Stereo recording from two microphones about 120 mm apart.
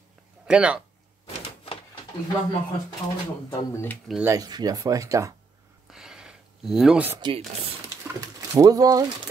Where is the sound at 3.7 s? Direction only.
20° left (ahead or behind).